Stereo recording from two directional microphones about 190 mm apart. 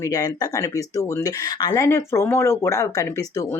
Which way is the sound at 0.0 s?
20° left (ahead or behind).